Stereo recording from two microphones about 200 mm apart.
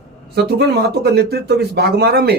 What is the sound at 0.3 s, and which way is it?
Speech, 55° right (ahead or behind).